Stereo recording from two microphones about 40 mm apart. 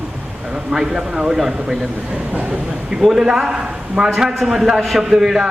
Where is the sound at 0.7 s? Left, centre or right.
Centre.